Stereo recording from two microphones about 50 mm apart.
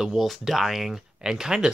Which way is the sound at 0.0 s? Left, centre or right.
Centre.